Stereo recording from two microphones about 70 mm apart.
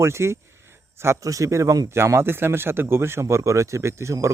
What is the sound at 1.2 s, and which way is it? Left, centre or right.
Speech, right.